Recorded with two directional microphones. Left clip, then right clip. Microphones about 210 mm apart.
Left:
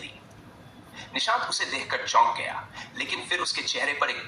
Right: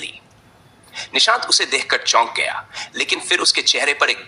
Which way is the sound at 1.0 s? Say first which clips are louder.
Right 10 dB; 50° right (ahead or behind).